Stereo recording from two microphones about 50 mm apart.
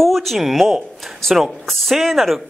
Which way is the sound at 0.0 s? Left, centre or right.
Centre.